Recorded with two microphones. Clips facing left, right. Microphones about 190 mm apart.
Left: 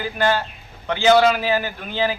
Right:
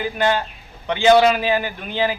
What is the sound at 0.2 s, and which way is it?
A man's voice, 15° right (ahead or behind).